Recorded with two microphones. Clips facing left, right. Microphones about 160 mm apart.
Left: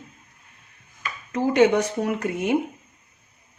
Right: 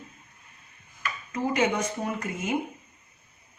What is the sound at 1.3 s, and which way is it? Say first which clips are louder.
Speech: left 8 dB; 75° left (ahead or behind).